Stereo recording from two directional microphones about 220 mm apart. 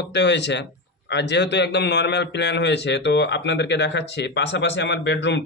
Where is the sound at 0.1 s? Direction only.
50° left (ahead or behind).